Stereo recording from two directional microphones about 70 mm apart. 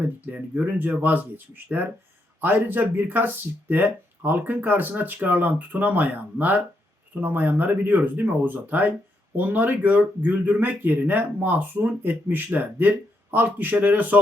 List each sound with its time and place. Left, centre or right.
0.3 s speech: right